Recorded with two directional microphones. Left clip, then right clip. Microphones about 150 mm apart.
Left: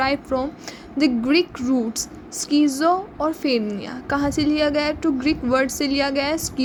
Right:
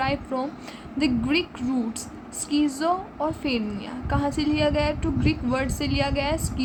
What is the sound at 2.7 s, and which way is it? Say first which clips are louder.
A woman's voice: left 5 dB; 30° left (ahead or behind).